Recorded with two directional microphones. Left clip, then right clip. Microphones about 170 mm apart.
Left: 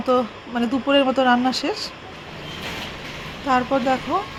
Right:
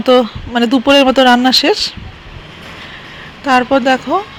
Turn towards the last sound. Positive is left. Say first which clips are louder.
# right 9 dB
turn(degrees=-25)  # may be behind; listen again after turning